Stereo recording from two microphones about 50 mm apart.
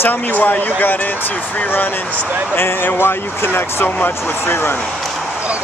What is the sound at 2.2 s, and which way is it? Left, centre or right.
Speech, right.